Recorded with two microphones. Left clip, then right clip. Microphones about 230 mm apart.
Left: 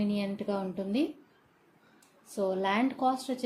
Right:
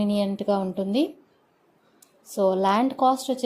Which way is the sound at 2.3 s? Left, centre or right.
Right.